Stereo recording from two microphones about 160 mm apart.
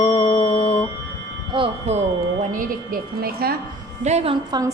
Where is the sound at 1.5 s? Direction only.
40° right (ahead or behind).